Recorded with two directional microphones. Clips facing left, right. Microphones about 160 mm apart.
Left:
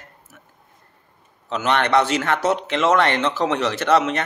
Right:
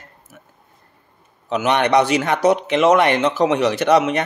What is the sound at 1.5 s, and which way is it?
Speech, 15° right (ahead or behind).